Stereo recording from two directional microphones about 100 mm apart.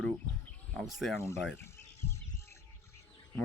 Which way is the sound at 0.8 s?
5° right (ahead or behind).